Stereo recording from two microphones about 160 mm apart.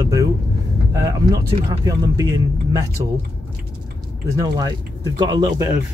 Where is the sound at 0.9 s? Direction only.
20° right (ahead or behind).